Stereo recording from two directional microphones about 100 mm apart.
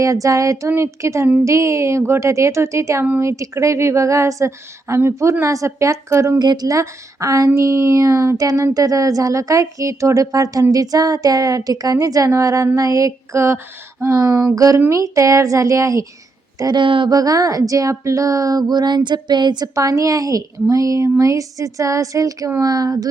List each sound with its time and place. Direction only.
0.0 s a woman's voice: 35° right (ahead or behind)
6.4 s a woman's voice: 45° right (ahead or behind)
16.6 s speech: 45° right (ahead or behind)
17.1 s a woman's voice: 35° right (ahead or behind)